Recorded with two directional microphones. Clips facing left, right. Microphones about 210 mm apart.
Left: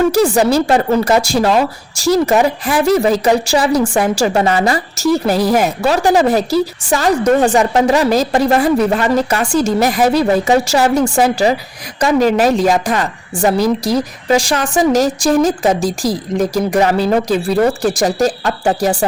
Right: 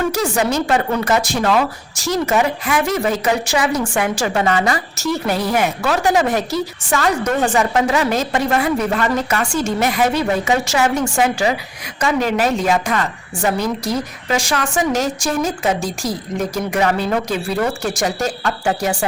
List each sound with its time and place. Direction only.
0.1 s a woman's voice: 35° left (ahead or behind)